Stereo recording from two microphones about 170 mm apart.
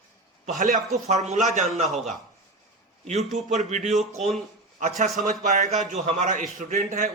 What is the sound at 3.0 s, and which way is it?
A man's voice, 40° right (ahead or behind).